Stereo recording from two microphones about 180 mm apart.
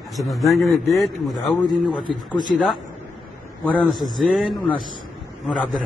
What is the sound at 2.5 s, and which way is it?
A man's voice, centre (ahead or behind).